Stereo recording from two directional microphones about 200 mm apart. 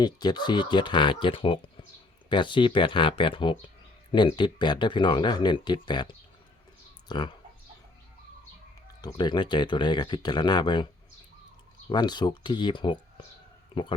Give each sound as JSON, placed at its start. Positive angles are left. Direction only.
{"t": 0.0, "sound": "speech", "side_deg": 20}
{"t": 7.1, "sound": "speech", "side_deg": 20}
{"t": 9.0, "sound": "speech", "side_deg": 20}
{"t": 11.9, "sound": "speech", "side_deg": 20}